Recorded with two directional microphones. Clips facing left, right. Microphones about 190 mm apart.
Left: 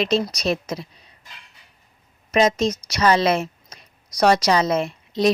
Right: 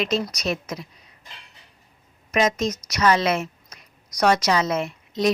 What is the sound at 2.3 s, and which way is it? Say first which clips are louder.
A woman's voice: left 3 dB; 30° left (ahead or behind).